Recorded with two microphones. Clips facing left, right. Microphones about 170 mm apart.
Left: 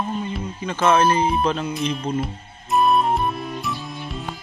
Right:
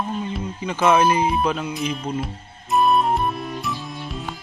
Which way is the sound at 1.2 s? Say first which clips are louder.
Even; 5° right (ahead or behind).